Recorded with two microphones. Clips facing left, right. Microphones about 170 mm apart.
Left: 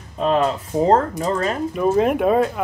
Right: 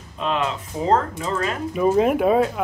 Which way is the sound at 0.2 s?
40° left (ahead or behind).